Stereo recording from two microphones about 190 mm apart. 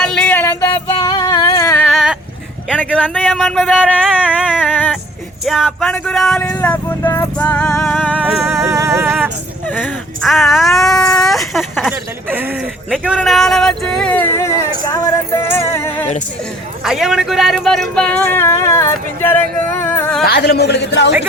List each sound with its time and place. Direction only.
0.0 s a sound: 5° left (ahead or behind)
1.9 s a sound: centre (ahead or behind)
3.0 s speech: 5° left (ahead or behind)
4.2 s a sound: 5° right (ahead or behind)
5.5 s speech: centre (ahead or behind)
6.5 s vehicle: 10° left (ahead or behind)
8.0 s music: 5° right (ahead or behind)
9.6 s speech: 5° left (ahead or behind); by 12.5 s 10° right (ahead or behind)
12.9 s speech: centre (ahead or behind)
13.9 s vehicle: 5° left (ahead or behind)
16.8 s speech: 5° right (ahead or behind)
19.8 s a sound: 10° left (ahead or behind)
20.2 s a man's voice: 55° left (ahead or behind)